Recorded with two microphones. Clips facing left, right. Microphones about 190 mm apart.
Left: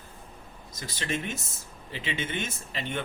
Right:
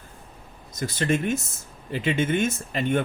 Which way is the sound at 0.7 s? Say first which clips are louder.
Right 9 dB; 50° right (ahead or behind).